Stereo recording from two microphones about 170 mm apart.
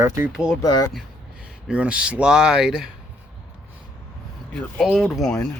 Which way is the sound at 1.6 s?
5° right (ahead or behind).